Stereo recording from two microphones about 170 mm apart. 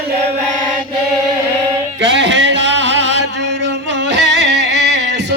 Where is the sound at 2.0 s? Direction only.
90° right.